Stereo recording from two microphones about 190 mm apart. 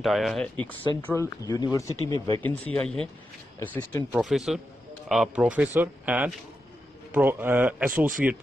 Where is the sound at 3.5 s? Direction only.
10° left (ahead or behind).